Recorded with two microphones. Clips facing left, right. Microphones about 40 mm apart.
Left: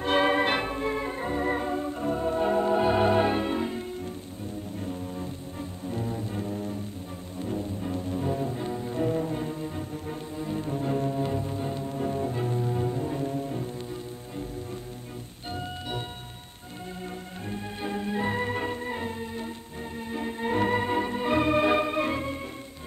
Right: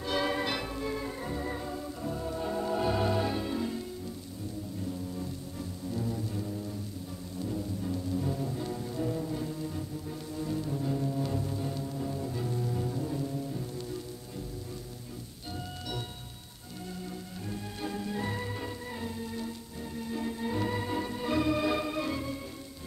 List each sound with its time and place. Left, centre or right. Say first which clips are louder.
0.0 s organ: left 7 dB; left
4.7 s music: left 2 dB; left
17.5 s music: left 4 dB; left
20.0 s organ: left 3 dB; left